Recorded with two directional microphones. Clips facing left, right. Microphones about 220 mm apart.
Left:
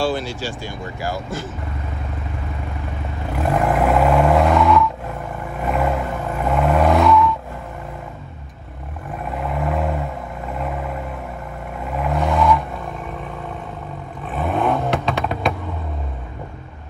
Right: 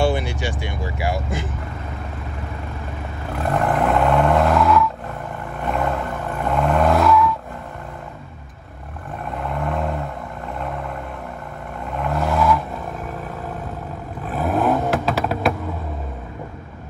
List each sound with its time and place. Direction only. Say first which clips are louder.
0.3 s speech: right 1 dB; 70° right (ahead or behind)
3.5 s vehicle: left 1 dB; centre (ahead or behind)
9.3 s vehicle: left 2 dB; 5° left (ahead or behind)
14.2 s vehicle: right 1 dB; centre (ahead or behind)